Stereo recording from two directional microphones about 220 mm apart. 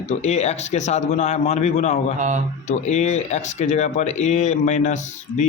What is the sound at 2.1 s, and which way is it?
Speech, 35° right (ahead or behind).